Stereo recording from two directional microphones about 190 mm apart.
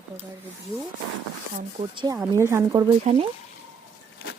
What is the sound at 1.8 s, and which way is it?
A woman's voice, 25° right (ahead or behind).